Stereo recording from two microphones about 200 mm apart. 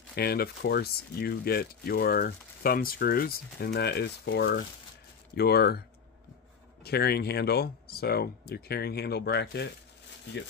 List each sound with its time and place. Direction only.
0.1 s speech: 50° left (ahead or behind)
6.8 s speech: 50° left (ahead or behind)